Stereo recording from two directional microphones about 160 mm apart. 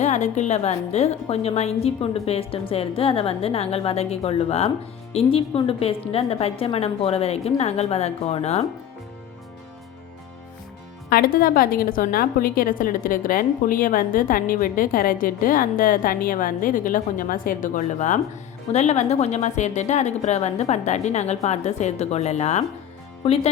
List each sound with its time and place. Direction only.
0.0 s a woman's voice: 50° left (ahead or behind)
11.1 s a woman's voice: 65° left (ahead or behind); by 23.5 s 40° left (ahead or behind)